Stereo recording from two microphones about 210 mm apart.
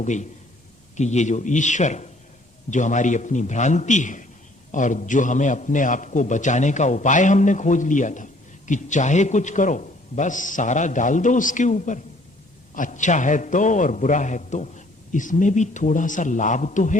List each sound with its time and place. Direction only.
0.0 s a man's voice: 35° left (ahead or behind)